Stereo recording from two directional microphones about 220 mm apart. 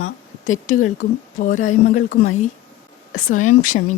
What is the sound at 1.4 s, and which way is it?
Speech, 35° left (ahead or behind).